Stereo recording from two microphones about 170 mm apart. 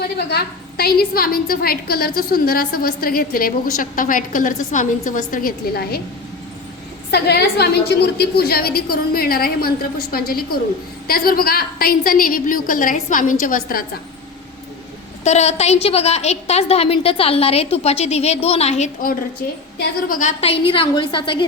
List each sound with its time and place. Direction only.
0.2 s a woman's voice: 75° left (ahead or behind)
7.1 s a woman's voice: 75° left (ahead or behind); by 13.8 s 55° left (ahead or behind)
15.2 s a woman's voice: 40° left (ahead or behind)
20.1 s a woman's voice: 50° left (ahead or behind)
20.4 s a woman's voice: 35° left (ahead or behind)